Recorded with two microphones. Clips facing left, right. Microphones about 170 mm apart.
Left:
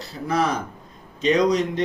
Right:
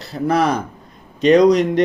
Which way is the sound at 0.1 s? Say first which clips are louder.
Right 6 dB; 65° right (ahead or behind).